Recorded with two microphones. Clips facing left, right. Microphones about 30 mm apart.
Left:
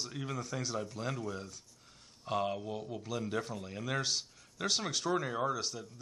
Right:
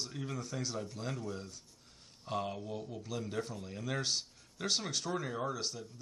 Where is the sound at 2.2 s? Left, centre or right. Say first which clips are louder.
Left 4 dB; centre.